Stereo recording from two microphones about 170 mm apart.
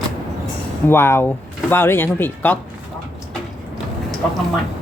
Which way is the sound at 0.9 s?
15° left (ahead or behind).